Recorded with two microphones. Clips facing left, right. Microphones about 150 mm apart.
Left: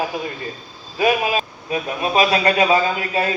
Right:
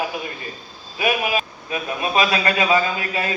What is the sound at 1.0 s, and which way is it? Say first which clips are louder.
A man's voice: left 3 dB; 30° left (ahead or behind).